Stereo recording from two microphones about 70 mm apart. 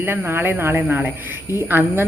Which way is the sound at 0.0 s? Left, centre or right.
Right.